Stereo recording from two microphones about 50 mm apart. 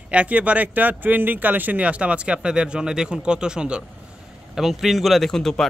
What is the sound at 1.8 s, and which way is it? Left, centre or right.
Speech, right.